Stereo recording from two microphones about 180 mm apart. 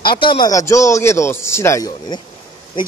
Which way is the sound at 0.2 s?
25° left (ahead or behind).